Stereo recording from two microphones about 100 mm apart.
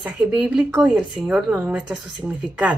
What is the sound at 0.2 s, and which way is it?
Speech, 10° right (ahead or behind).